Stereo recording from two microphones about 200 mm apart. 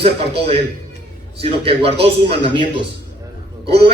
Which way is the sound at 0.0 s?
30° right (ahead or behind).